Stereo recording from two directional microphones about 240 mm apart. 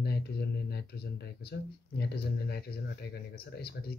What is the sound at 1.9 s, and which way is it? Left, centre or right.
Speech, left.